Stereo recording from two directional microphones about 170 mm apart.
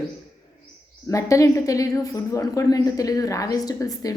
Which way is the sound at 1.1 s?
20° left (ahead or behind).